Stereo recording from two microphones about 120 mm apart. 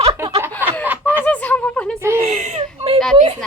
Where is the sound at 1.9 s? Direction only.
25° right (ahead or behind).